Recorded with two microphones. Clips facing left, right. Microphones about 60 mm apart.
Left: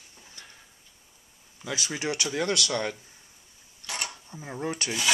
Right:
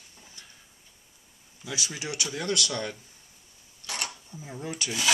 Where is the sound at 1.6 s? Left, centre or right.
Left.